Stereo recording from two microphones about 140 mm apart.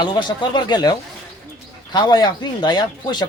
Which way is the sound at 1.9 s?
30° left (ahead or behind).